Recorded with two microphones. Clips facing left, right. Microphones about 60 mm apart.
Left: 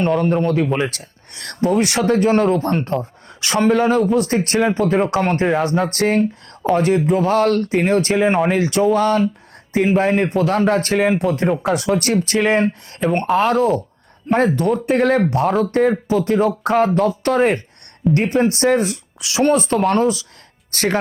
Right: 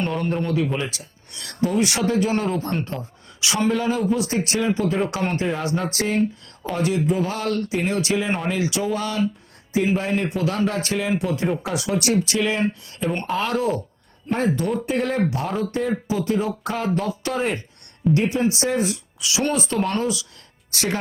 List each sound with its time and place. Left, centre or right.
0.4 s speech: left
11.6 s speech: left
14.3 s speech: left